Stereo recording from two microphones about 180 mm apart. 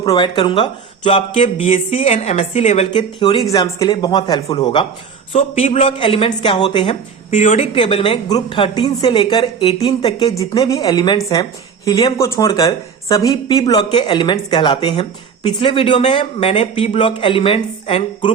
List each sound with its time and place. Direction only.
0.0 s a woman's voice: 25° left (ahead or behind)